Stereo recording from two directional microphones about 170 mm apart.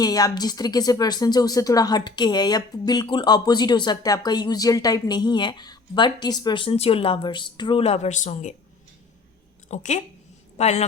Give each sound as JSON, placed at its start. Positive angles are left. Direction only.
{"t": 0.0, "sound": "speech", "side_deg": 20}
{"t": 9.6, "sound": "a woman's voice", "side_deg": 45}